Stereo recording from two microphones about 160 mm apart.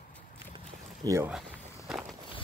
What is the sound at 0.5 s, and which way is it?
Boat, 20° right (ahead or behind).